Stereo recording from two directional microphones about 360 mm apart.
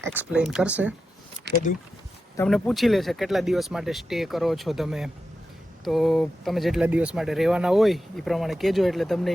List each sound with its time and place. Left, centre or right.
0.0 s speech: centre
1.5 s speech: right
2.3 s speech: centre